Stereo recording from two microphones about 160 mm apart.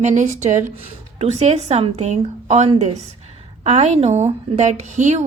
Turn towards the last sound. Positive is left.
turn(degrees=-45)  # may be behind; listen again after turning